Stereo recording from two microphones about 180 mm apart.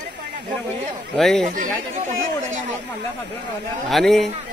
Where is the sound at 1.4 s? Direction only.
50° right (ahead or behind).